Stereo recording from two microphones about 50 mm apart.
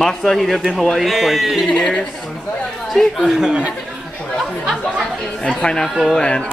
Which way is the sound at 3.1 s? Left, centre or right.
Centre.